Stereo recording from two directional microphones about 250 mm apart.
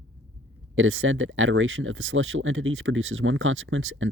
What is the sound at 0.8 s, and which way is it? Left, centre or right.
Speech, right.